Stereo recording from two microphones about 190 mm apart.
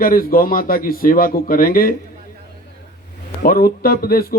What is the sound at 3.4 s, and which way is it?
Speech, 50° left (ahead or behind).